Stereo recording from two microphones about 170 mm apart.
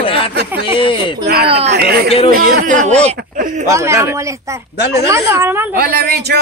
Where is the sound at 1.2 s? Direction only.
70° right (ahead or behind).